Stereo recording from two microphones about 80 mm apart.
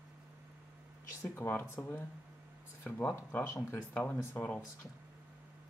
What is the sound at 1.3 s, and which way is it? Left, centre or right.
Speech, left.